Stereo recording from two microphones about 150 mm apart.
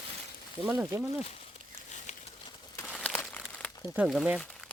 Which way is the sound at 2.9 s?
5° left (ahead or behind).